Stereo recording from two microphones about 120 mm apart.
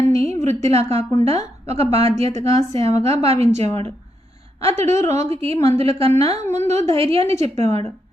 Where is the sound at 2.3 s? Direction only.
25° left (ahead or behind).